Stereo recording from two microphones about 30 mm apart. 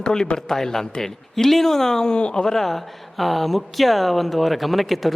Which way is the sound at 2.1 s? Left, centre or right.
Left.